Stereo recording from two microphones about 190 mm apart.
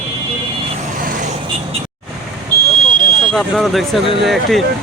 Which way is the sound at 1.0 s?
45° right (ahead or behind).